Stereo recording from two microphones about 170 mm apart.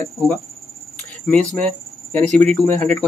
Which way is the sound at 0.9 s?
5° left (ahead or behind).